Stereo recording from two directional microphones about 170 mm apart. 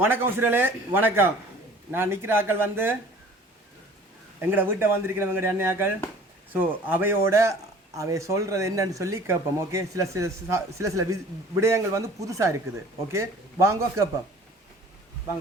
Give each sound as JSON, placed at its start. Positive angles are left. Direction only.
{"t": 0.0, "sound": "speech", "side_deg": -10}
{"t": 4.4, "sound": "speech", "side_deg": -15}
{"t": 6.9, "sound": "speech", "side_deg": -15}